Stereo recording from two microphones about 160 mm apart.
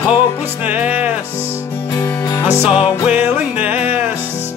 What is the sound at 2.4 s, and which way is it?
Music, 40° left (ahead or behind).